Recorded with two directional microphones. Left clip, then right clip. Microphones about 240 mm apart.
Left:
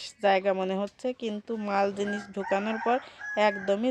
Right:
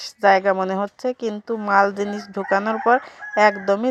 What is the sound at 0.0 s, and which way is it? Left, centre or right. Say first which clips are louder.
A woman's voice: right 8 dB; centre.